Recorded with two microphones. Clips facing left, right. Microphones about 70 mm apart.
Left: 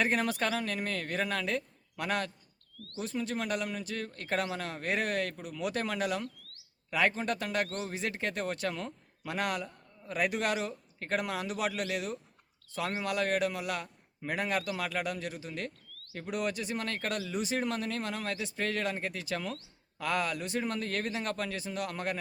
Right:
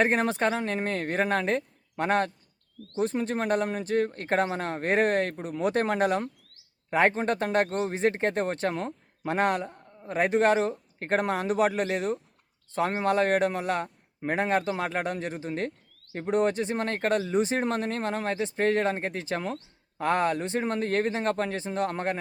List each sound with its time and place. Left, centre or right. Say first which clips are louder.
0.0 s speech: right 6 dB; right